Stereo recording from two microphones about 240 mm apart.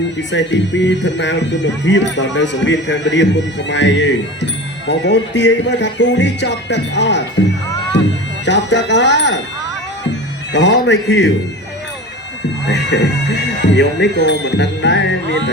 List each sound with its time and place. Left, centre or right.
0.2 s speech: left
8.4 s speech: left
10.0 s music: left
12.6 s speech: left